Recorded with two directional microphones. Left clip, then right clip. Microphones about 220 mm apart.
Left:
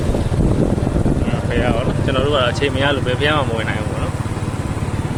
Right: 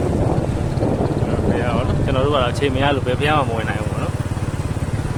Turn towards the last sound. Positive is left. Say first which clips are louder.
# left 1 dB
turn(degrees=-5)  # may be behind; listen again after turning